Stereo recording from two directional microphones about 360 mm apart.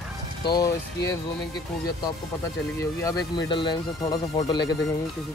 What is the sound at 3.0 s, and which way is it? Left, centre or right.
Speech, centre.